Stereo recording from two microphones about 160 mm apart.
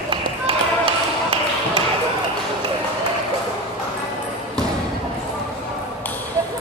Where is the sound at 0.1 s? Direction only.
35° right (ahead or behind).